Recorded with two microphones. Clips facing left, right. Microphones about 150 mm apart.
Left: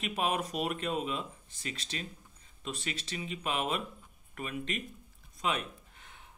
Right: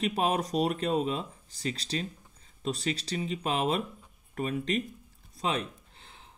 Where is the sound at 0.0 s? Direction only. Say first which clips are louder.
Right 4 dB; 35° right (ahead or behind).